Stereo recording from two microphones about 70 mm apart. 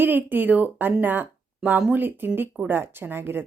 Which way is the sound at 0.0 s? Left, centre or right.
Right.